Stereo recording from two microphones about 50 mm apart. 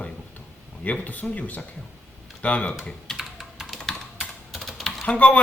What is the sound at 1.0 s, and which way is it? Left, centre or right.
A man's voice, left.